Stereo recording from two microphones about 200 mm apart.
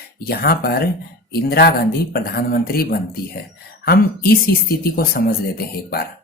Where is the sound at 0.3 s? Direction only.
50° left (ahead or behind).